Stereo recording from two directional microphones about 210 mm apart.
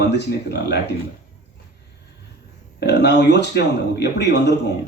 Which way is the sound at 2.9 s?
55° left (ahead or behind).